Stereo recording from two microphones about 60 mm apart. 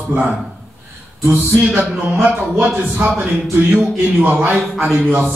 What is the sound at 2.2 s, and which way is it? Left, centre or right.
Speech, right.